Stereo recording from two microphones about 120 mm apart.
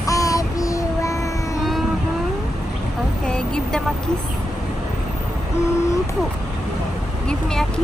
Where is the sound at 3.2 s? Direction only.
5° left (ahead or behind).